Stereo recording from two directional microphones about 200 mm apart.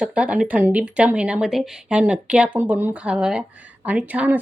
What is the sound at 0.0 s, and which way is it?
Speech, 5° right (ahead or behind).